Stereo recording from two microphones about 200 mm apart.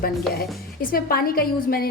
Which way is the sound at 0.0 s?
45° left (ahead or behind).